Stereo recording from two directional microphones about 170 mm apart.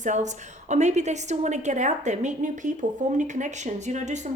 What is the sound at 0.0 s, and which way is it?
A woman's voice, 45° right (ahead or behind).